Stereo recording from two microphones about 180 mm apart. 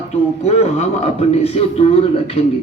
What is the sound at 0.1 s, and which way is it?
Speech, 35° left (ahead or behind).